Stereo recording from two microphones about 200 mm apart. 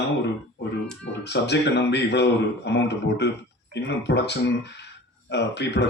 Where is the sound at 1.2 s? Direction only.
60° left (ahead or behind).